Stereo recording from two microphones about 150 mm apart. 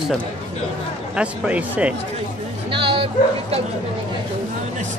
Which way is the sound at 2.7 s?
35° right (ahead or behind).